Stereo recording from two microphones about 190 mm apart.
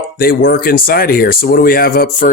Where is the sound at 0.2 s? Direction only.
50° left (ahead or behind).